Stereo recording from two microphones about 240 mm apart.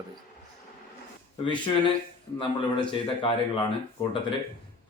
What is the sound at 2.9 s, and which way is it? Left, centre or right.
Speech, left.